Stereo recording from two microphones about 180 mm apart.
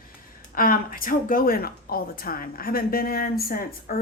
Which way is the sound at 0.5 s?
50° left (ahead or behind).